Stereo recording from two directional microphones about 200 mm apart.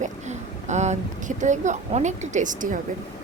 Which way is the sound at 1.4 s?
35° right (ahead or behind).